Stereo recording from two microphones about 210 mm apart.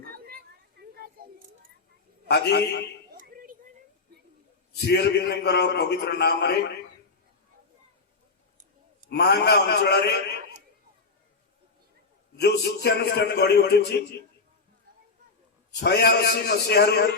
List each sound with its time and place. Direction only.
0.1 s a sound: 45° right (ahead or behind)
2.2 s a man's voice: 55° left (ahead or behind)
4.7 s a man's voice: 50° left (ahead or behind)
9.0 s a man's voice: 50° left (ahead or behind)
12.4 s a man's voice: 50° left (ahead or behind)
15.8 s a man's voice: 50° left (ahead or behind)